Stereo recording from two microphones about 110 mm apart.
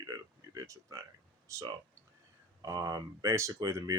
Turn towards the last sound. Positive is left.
turn(degrees=-30)  # may be behind; listen again after turning